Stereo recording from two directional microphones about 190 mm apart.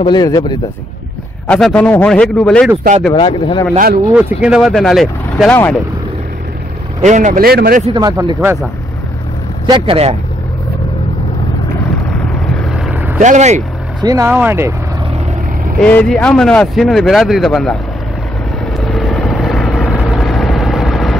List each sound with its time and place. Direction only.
0.0 s a man's voice: 20° left (ahead or behind)
1.5 s speech: 5° left (ahead or behind)
3.2 s a man's voice: 25° left (ahead or behind)
3.7 s speech: 50° right (ahead or behind)
4.1 s speech: 5° right (ahead or behind)
7.0 s speech: 40° right (ahead or behind)
7.9 s speech: 20° right (ahead or behind)
9.7 s speech: 30° right (ahead or behind)
12.6 s vehicle: 5° right (ahead or behind)
13.2 s speech: 40° right (ahead or behind)
14.0 s speech: 15° right (ahead or behind)
15.8 s speech: 5° left (ahead or behind)
18.9 s vehicle: centre (ahead or behind)